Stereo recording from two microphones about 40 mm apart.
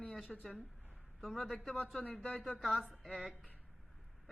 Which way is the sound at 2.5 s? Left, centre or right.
Centre.